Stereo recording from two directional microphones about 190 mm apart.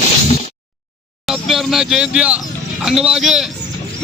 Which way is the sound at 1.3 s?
Centre (ahead or behind).